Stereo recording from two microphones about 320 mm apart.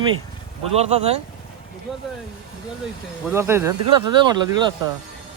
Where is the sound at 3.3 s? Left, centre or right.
Centre.